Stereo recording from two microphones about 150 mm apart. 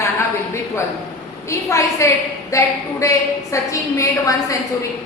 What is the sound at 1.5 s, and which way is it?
A woman's voice, 20° left (ahead or behind).